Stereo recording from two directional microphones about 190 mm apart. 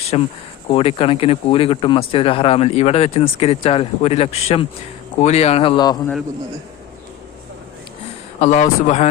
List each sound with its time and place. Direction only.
0.1 s speech: 30° left (ahead or behind)
8.4 s speech: 35° left (ahead or behind)